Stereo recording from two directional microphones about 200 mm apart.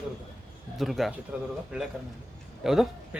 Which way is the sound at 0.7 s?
Centre (ahead or behind).